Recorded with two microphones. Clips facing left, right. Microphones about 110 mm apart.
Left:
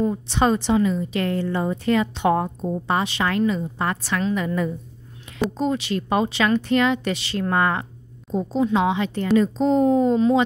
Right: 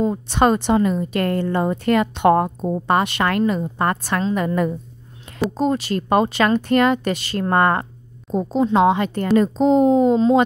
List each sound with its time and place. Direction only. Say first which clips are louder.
0.1 s a woman's voice: right 3 dB; 55° right (ahead or behind)
5.6 s a woman's voice: right 5 dB; 45° right (ahead or behind)
9.6 s speech: right 6 dB; 15° right (ahead or behind)